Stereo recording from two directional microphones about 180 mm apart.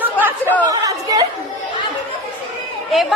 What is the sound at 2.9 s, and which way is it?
Speech, centre (ahead or behind).